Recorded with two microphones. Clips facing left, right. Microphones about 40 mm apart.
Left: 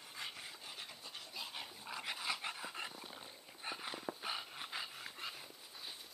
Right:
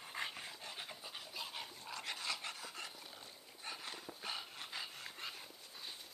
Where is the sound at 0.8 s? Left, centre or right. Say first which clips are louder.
Right 1 dB; centre.